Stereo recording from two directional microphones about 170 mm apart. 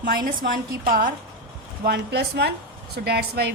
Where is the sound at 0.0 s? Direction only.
55° right (ahead or behind).